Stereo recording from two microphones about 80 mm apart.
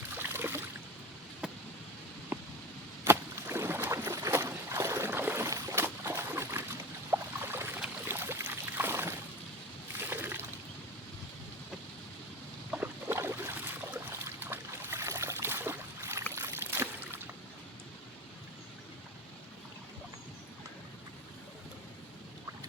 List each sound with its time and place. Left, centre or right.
0.2 s a sound: right
2.3 s rain: right
3.0 s rowboat: right
4.3 s boat: right
5.5 s boat: right
5.8 s a sound: right
7.1 s boat: right
10.0 s a sound: right
12.8 s boat: right